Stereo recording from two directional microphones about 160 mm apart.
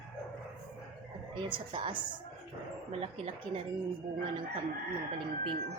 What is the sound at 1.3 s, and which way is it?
Speech, 30° right (ahead or behind).